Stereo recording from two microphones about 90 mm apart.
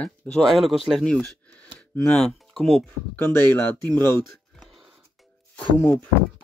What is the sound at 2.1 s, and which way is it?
Speech, 5° left (ahead or behind).